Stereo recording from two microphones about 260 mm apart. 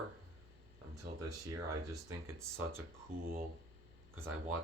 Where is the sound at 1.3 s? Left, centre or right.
Centre.